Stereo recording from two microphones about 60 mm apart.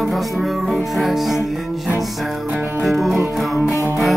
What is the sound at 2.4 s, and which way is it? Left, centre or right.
Music, right.